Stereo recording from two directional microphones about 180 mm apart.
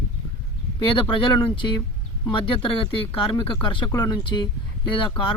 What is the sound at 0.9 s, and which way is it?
Speech, 30° left (ahead or behind).